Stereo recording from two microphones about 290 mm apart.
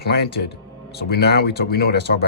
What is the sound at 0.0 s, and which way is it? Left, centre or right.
Speech, left.